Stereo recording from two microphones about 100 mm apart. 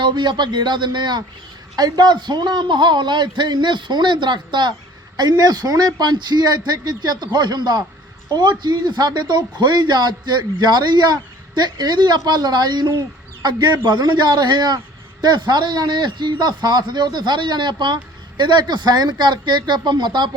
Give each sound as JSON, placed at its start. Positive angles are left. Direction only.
{"t": 0.0, "sound": "speech", "side_deg": -50}